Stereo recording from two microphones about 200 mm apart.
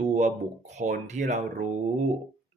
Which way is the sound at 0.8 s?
35° right (ahead or behind).